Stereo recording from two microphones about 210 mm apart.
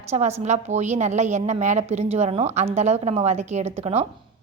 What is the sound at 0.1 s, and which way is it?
A woman's voice, 30° right (ahead or behind).